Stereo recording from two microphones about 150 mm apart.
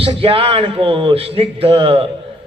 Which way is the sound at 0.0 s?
35° right (ahead or behind).